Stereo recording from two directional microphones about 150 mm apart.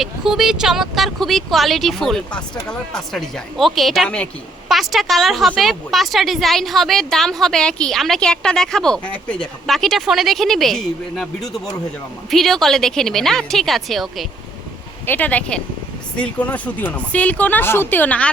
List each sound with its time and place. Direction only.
0.0 s speech: centre (ahead or behind)
15.0 s a woman's voice: 10° left (ahead or behind)